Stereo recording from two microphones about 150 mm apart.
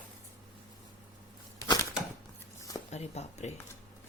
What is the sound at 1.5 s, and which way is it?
Crushing, 25° left (ahead or behind).